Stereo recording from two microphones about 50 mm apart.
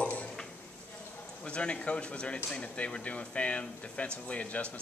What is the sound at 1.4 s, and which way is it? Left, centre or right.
Speech, left.